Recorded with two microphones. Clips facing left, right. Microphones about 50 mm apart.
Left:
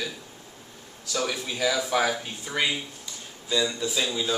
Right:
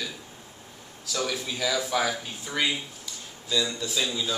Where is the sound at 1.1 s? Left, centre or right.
Centre.